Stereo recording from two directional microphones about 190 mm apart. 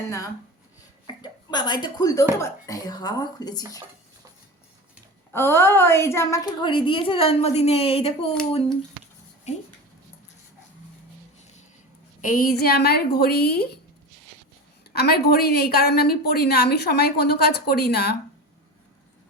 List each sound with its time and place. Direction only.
1.0 s a woman's voice: 25° left (ahead or behind)
5.3 s a woman's voice: 15° left (ahead or behind); by 8.3 s 30° left (ahead or behind)
12.2 s a woman's voice: 45° left (ahead or behind)
14.9 s a woman's voice: 55° left (ahead or behind)